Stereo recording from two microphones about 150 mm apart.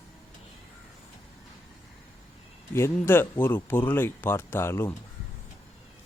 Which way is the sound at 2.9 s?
15° left (ahead or behind).